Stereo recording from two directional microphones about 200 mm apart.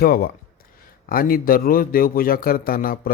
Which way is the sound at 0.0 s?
50° left (ahead or behind).